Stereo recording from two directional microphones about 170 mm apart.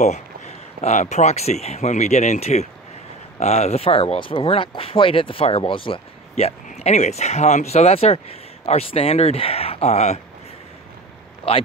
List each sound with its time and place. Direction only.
0.0 s speech: 40° left (ahead or behind)
11.5 s speech: 35° left (ahead or behind)